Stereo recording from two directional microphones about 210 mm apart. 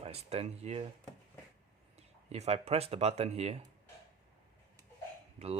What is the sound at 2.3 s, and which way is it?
Speech, 30° right (ahead or behind).